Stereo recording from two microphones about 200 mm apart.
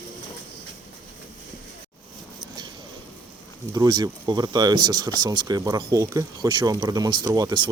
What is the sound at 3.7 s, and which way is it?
Speech, 20° right (ahead or behind).